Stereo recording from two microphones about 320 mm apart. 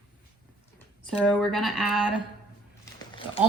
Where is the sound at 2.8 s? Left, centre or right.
Centre.